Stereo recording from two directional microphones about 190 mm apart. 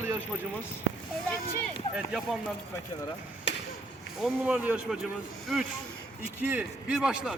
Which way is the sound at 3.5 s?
70° left (ahead or behind).